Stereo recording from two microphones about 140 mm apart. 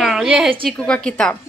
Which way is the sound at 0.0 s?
5° right (ahead or behind).